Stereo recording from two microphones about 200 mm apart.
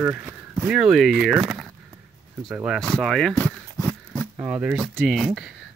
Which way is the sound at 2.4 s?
5° right (ahead or behind).